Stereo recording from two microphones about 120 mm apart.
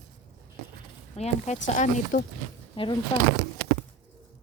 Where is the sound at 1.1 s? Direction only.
70° left (ahead or behind).